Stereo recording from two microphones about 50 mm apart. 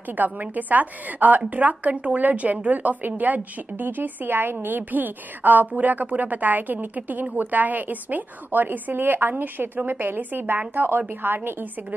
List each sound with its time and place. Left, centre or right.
0.1 s a woman's voice: right